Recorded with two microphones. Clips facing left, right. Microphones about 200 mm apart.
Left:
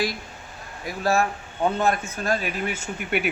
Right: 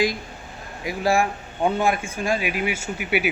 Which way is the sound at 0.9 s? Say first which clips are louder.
Right 2 dB; 15° right (ahead or behind).